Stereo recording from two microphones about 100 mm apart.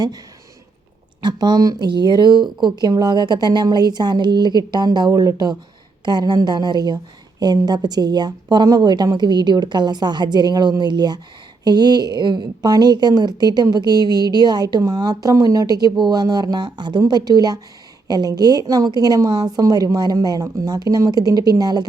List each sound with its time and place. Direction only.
1.2 s a woman's voice: 45° right (ahead or behind)